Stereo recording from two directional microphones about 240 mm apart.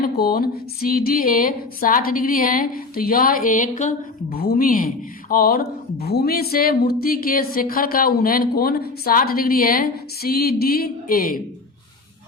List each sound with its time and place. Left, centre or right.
0.0 s speech: left